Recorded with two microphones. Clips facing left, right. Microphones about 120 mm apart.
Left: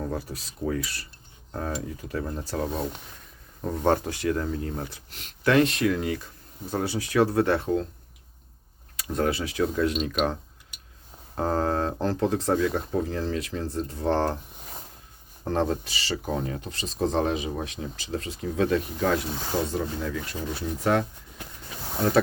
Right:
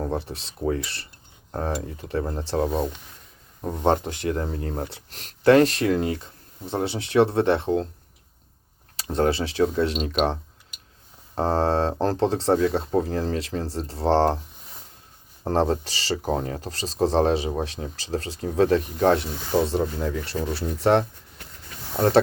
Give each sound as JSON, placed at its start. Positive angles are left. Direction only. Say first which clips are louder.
{"t": 0.0, "sound": "speech", "louder": "right 3 dB", "side_deg": -30}
{"t": 4.4, "sound": "speech", "louder": "right 1 dB", "side_deg": -35}
{"t": 9.0, "sound": "speech", "louder": "right 4 dB", "side_deg": -30}
{"t": 11.3, "sound": "speech", "louder": "right 3 dB", "side_deg": -30}
{"t": 15.4, "sound": "speech", "louder": "right 4 dB", "side_deg": -40}